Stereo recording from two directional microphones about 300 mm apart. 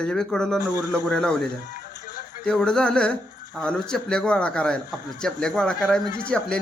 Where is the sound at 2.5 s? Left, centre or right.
Centre.